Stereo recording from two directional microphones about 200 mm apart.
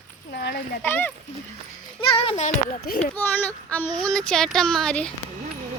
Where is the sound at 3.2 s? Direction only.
10° left (ahead or behind).